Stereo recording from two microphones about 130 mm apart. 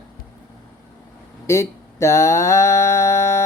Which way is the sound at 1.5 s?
20° left (ahead or behind).